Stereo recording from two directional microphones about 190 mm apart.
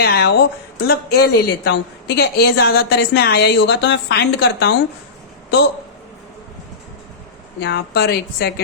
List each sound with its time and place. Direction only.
0.0 s a woman's voice: 55° left (ahead or behind)
7.6 s a woman's voice: 60° left (ahead or behind)